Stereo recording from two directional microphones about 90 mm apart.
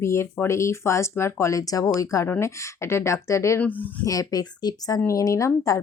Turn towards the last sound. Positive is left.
turn(degrees=35)  # may be behind; listen again after turning